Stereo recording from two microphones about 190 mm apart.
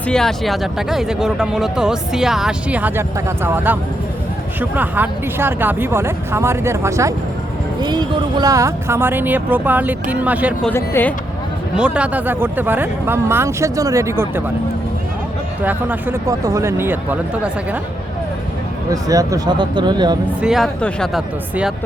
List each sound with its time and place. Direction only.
0.1 s speech: centre (ahead or behind)
10.7 s speech: 10° left (ahead or behind)
11.8 s speech: 5° right (ahead or behind)
15.6 s speech: 10° right (ahead or behind)
18.9 s speech: 20° right (ahead or behind)
20.4 s speech: centre (ahead or behind)